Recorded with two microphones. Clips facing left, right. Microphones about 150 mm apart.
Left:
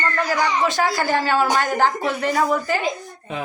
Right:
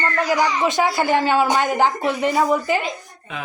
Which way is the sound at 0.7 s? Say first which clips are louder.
Right 2 dB; 20° right (ahead or behind).